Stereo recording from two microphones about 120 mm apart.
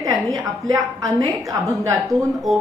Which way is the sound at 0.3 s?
25° right (ahead or behind).